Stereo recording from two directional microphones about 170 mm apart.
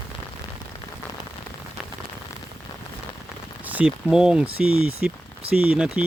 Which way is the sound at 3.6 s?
10° right (ahead or behind).